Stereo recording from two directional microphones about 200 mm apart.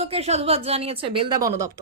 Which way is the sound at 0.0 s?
30° right (ahead or behind).